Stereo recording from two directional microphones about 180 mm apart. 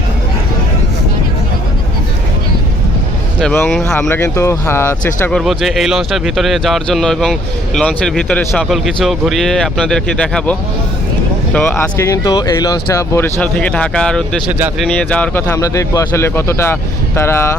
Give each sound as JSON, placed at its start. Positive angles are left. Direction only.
{"t": 3.4, "sound": "speech", "side_deg": 5}
{"t": 5.4, "sound": "speech", "side_deg": 0}